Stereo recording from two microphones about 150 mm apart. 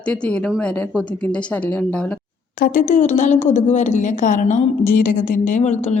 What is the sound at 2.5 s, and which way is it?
A woman's voice, 75° left (ahead or behind).